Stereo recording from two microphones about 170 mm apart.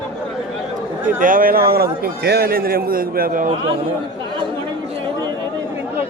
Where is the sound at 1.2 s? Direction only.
55° right (ahead or behind).